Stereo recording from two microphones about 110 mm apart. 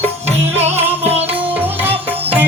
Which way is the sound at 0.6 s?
75° right (ahead or behind).